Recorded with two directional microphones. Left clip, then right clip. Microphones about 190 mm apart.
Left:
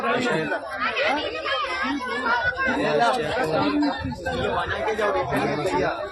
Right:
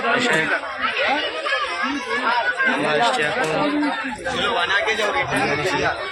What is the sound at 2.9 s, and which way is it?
Speech, 5° right (ahead or behind).